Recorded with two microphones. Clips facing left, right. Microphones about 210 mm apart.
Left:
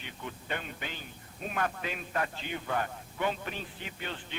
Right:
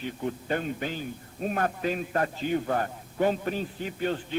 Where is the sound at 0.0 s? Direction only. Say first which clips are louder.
Right 11 dB; 40° right (ahead or behind).